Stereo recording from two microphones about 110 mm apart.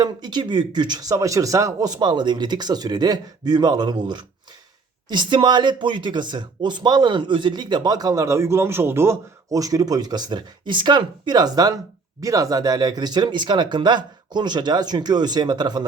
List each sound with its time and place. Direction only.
0.0 s speech: 45° right (ahead or behind)